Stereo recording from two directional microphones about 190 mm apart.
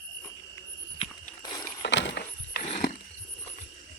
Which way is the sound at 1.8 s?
65° left (ahead or behind).